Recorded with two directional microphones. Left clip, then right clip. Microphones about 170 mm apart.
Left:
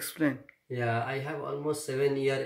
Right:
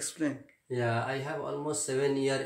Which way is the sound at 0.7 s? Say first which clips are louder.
Even; centre (ahead or behind).